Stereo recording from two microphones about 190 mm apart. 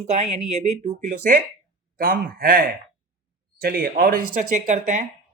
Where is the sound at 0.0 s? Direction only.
35° right (ahead or behind).